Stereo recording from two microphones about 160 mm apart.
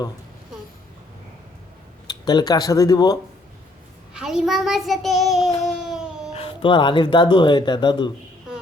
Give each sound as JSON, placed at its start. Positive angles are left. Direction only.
{"t": 2.0, "sound": "speech", "side_deg": 25}
{"t": 4.1, "sound": "a child's voice", "side_deg": -5}
{"t": 5.6, "sound": "baby cry", "side_deg": -5}
{"t": 6.3, "sound": "speech", "side_deg": 35}